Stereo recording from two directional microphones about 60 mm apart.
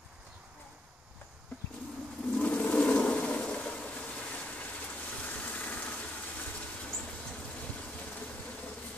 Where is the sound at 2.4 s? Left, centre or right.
Left.